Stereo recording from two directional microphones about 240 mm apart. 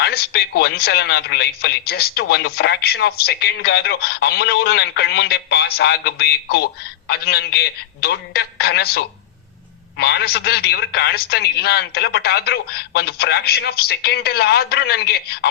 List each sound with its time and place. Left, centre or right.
0.0 s a man's voice: left